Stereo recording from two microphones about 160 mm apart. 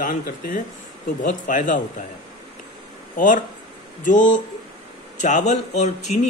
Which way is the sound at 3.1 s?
55° left (ahead or behind).